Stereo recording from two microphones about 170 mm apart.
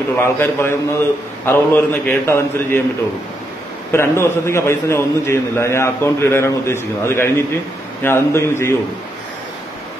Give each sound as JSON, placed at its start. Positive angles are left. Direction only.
{"t": 0.2, "sound": "a man's voice", "side_deg": 15}
{"t": 3.9, "sound": "a man's voice", "side_deg": 15}